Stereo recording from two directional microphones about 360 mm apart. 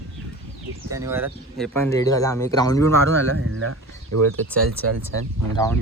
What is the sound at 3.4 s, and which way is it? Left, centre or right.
Speech, right.